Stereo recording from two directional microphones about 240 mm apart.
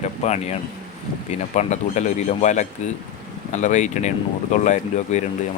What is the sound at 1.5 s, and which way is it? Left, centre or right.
Speech, left.